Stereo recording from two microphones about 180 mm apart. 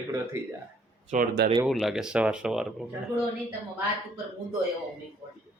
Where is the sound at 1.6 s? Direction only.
Centre (ahead or behind).